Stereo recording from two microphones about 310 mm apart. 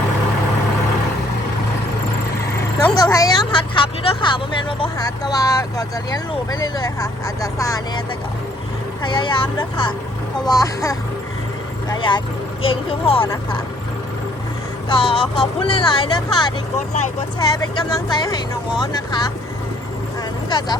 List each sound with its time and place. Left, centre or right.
2.8 s speech: centre
9.0 s speech: centre
14.8 s speech: centre
20.5 s speech: centre